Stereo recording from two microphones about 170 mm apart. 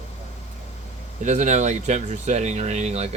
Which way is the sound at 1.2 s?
45° right (ahead or behind).